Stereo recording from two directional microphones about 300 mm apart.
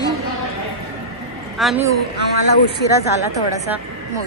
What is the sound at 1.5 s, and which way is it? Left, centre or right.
Speech, centre.